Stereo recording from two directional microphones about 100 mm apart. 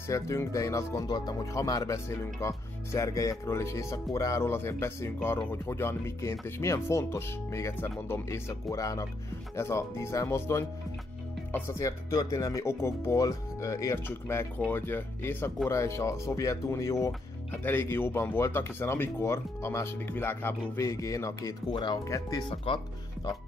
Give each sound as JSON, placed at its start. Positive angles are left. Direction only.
{"t": 0.1, "sound": "speech", "side_deg": 30}
{"t": 1.0, "sound": "speech", "side_deg": 45}
{"t": 1.5, "sound": "speech", "side_deg": 35}
{"t": 11.8, "sound": "speech", "side_deg": 35}
{"t": 22.7, "sound": "speech", "side_deg": 60}